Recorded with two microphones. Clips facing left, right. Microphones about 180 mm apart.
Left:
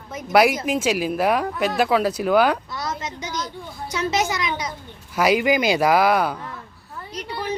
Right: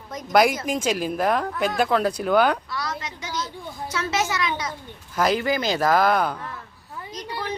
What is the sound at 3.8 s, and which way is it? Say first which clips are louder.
A woman's voice: left 3 dB; 15° left (ahead or behind).